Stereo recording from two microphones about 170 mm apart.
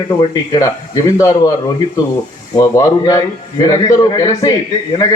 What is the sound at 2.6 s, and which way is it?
Speech, 20° left (ahead or behind).